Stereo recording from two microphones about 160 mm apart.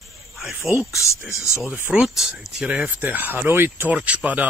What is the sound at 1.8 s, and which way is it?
Speech, 5° right (ahead or behind).